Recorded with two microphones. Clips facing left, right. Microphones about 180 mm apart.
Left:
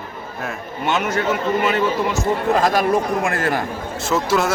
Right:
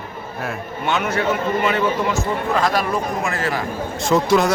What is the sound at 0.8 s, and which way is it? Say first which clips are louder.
Speech: left 1 dB; 45° left (ahead or behind).